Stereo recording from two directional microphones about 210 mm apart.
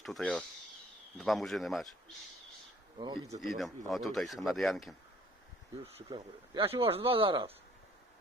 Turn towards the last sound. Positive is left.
turn(degrees=-25)  # may be behind; listen again after turning